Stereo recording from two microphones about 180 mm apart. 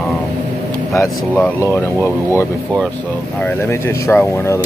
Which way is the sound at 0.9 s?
15° left (ahead or behind).